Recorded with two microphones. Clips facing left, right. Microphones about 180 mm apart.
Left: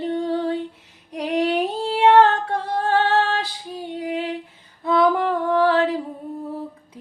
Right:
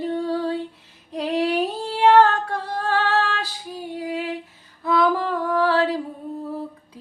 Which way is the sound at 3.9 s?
20° left (ahead or behind).